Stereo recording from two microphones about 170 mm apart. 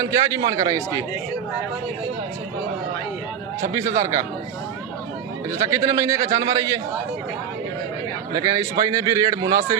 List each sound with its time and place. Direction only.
0.0 s a man's voice: 20° right (ahead or behind)
3.6 s a man's voice: 15° right (ahead or behind)
5.5 s a man's voice: 20° right (ahead or behind)
8.3 s a man's voice: 20° right (ahead or behind)